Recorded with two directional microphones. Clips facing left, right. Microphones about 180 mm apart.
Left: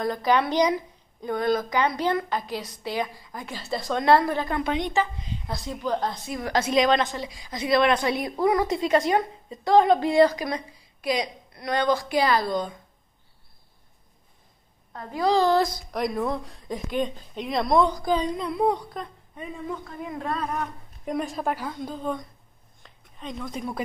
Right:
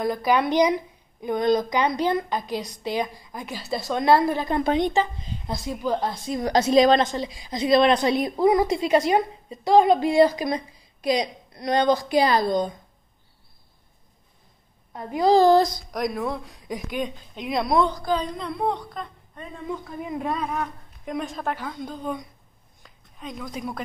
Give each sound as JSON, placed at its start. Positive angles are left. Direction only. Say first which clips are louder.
{"t": 0.0, "sound": "a woman's voice", "louder": "right 1 dB", "side_deg": -10}
{"t": 4.6, "sound": "speech", "louder": "right 4 dB", "side_deg": -35}
{"t": 5.5, "sound": "a woman's voice", "louder": "right 2 dB", "side_deg": -10}
{"t": 6.2, "sound": "a woman's voice", "louder": "right 4 dB", "side_deg": -30}
{"t": 10.3, "sound": "a woman's voice", "louder": "right 3 dB", "side_deg": -30}
{"t": 14.9, "sound": "a child's voice", "louder": "right 4 dB", "side_deg": -15}
{"t": 15.2, "sound": "speech", "louder": "right 4 dB", "side_deg": -40}
{"t": 15.9, "sound": "a woman's voice", "louder": "even", "side_deg": 0}
{"t": 18.0, "sound": "speech", "louder": "left 1 dB", "side_deg": 15}
{"t": 20.0, "sound": "a woman's voice", "louder": "right 2 dB", "side_deg": -20}
{"t": 22.8, "sound": "a sound", "louder": "even", "side_deg": -5}